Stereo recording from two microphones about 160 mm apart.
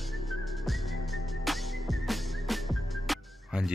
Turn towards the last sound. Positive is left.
turn(degrees=0)  # may be behind; listen again after turning